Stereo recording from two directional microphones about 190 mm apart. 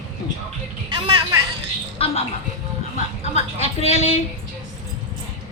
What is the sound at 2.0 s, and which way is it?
Speech, 30° left (ahead or behind).